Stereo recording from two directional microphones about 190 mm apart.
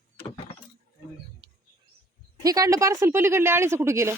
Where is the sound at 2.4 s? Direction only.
20° right (ahead or behind).